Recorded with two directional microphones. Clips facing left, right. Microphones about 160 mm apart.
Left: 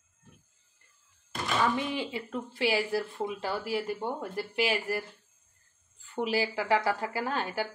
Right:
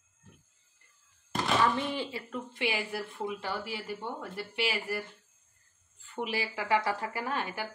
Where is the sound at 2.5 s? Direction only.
35° left (ahead or behind).